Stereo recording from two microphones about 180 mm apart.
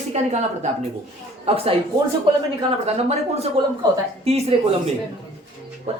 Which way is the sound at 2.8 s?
35° right (ahead or behind).